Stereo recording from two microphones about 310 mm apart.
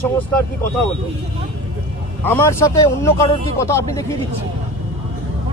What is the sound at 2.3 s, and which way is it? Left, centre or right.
A man's voice, centre.